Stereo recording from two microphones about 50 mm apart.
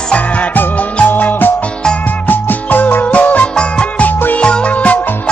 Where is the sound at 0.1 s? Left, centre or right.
Left.